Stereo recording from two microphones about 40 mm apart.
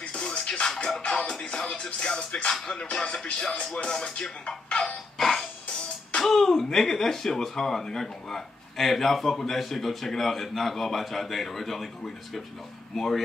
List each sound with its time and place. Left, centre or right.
0.0 s music: left
1.6 s music: centre
1.9 s speech: left
5.1 s music: centre
6.2 s speech: centre